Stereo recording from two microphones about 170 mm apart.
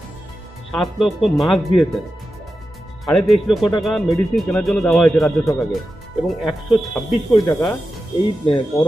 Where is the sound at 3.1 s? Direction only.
Centre (ahead or behind).